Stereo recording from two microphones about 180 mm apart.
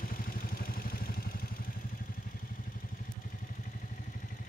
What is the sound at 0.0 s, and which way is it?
Vehicle, 50° left (ahead or behind).